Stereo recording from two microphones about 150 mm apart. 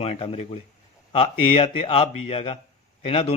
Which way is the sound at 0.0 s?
40° left (ahead or behind).